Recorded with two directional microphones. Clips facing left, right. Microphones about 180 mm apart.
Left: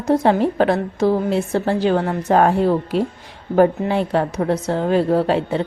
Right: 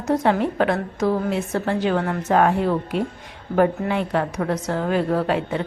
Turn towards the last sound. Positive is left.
turn(degrees=30)  # may be behind; listen again after turning